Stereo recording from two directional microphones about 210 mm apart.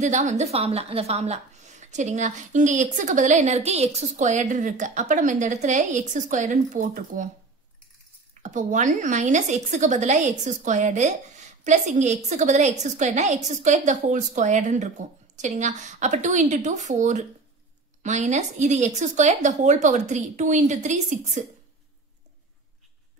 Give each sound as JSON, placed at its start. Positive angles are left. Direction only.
{"t": 0.0, "sound": "a woman's voice", "side_deg": -35}
{"t": 8.4, "sound": "a woman's voice", "side_deg": -35}